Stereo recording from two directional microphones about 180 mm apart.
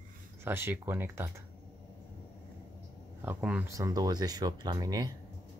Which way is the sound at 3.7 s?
20° right (ahead or behind).